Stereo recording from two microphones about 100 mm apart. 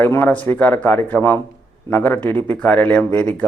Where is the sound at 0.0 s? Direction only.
20° left (ahead or behind).